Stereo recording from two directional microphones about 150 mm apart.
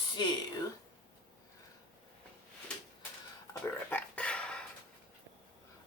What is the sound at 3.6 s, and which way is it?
Burping, 10° left (ahead or behind).